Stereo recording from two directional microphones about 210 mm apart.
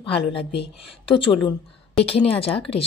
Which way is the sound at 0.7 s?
25° left (ahead or behind).